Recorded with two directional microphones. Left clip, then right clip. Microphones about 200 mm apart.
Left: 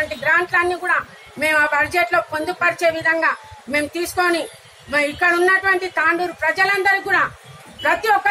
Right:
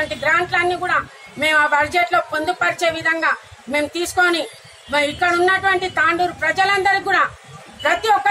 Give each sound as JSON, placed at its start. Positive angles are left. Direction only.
{"t": 0.2, "sound": "a woman's voice", "side_deg": 10}